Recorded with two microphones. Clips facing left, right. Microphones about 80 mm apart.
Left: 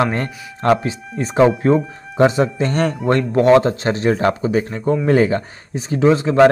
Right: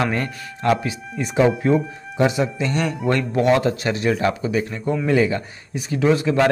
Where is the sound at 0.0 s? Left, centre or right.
Left.